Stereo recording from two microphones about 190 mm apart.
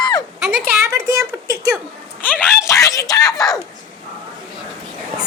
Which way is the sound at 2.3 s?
10° left (ahead or behind).